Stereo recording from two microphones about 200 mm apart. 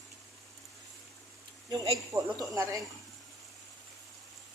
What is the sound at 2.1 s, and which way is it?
Speech, 10° right (ahead or behind).